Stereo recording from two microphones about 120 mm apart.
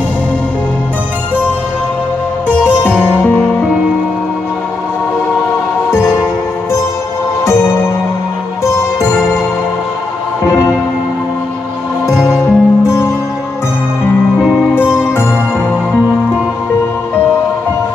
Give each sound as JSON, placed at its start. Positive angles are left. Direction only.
{"t": 2.9, "sound": "music", "side_deg": 15}
{"t": 5.9, "sound": "music", "side_deg": 20}
{"t": 12.1, "sound": "music", "side_deg": 20}
{"t": 14.4, "sound": "music", "side_deg": 0}
{"t": 14.8, "sound": "music", "side_deg": 20}